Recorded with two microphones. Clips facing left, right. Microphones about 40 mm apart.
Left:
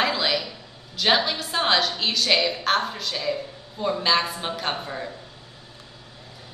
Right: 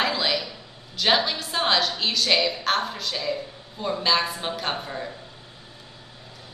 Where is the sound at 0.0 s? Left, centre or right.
Centre.